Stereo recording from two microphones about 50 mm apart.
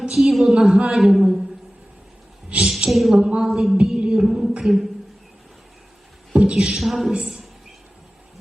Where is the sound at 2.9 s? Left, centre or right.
Centre.